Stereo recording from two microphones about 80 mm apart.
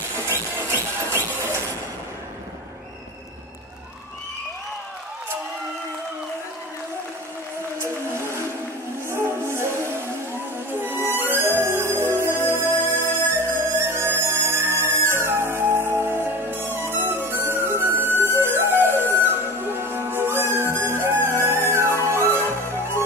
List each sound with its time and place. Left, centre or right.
0.2 s music: right
7.8 s whale vocalization: right
9.1 s music: right